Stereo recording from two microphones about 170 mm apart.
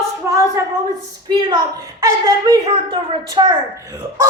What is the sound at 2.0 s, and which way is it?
A woman's voice, 20° right (ahead or behind).